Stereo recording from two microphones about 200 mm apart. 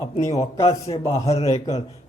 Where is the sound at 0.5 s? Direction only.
30° left (ahead or behind).